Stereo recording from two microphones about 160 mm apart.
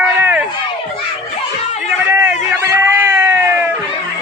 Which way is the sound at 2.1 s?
15° right (ahead or behind).